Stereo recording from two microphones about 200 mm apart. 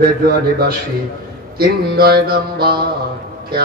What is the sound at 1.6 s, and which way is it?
Mantra, 50° right (ahead or behind).